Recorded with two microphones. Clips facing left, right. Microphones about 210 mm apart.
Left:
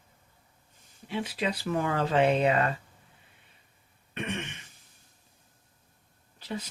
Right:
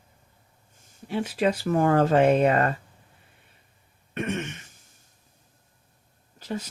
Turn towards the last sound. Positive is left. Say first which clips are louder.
# right 4 dB
turn(degrees=-45)  # may be behind; listen again after turning